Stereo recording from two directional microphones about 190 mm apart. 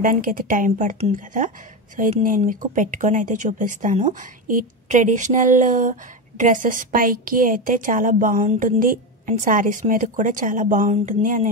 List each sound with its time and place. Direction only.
0.0 s speech: 45° right (ahead or behind)